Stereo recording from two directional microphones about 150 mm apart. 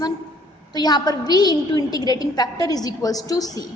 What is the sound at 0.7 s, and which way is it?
A woman's voice, 25° left (ahead or behind).